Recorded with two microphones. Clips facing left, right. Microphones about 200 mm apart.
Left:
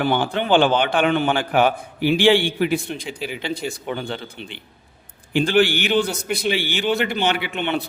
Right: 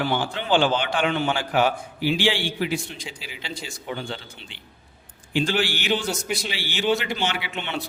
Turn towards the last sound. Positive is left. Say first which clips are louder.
# left 7 dB
turn(degrees=55)  # may be behind; listen again after turning